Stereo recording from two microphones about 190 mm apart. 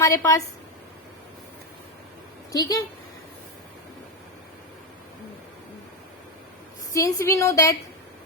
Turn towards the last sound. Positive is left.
turn(degrees=15)  # may be behind; listen again after turning